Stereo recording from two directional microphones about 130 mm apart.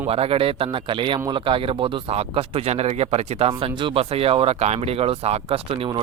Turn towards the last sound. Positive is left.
turn(degrees=-50)  # may be behind; listen again after turning